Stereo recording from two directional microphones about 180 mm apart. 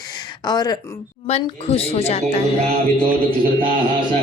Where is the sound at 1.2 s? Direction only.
35° left (ahead or behind).